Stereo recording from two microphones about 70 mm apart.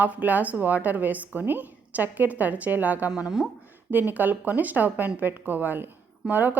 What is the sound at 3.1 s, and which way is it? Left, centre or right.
Speech, centre.